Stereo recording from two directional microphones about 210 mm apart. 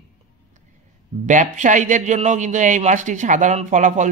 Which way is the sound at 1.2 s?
35° right (ahead or behind).